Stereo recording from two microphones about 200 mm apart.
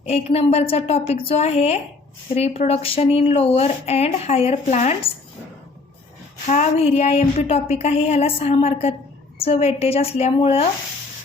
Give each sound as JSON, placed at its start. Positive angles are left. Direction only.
{"t": 0.1, "sound": "speech", "side_deg": 30}
{"t": 6.5, "sound": "a woman's voice", "side_deg": 35}